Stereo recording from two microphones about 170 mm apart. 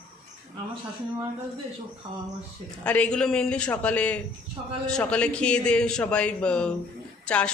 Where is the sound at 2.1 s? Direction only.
25° right (ahead or behind).